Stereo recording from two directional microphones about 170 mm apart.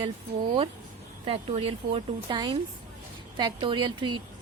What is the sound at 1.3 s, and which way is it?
A woman's voice, 35° right (ahead or behind).